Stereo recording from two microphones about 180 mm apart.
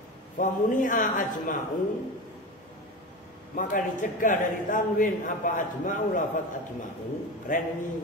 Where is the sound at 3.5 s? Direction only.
45° left (ahead or behind).